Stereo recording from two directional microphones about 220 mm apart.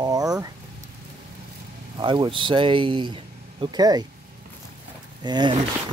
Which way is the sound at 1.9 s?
20° right (ahead or behind).